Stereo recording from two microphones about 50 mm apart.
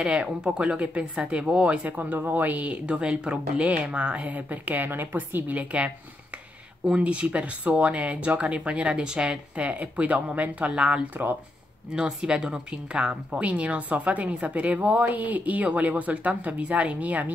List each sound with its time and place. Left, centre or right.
0.0 s speech: centre
6.9 s speech: right